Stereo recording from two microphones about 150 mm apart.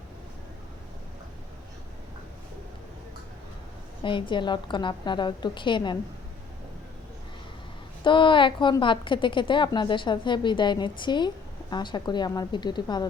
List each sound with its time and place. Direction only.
4.0 s a woman's voice: 35° left (ahead or behind)
8.0 s a woman's voice: 35° left (ahead or behind)